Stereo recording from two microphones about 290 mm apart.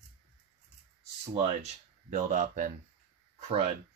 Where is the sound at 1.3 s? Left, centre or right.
Right.